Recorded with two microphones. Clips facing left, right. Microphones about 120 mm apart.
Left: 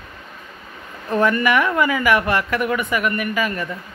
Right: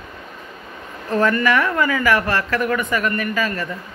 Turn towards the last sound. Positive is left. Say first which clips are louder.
# even
turn(degrees=15)  # may be behind; listen again after turning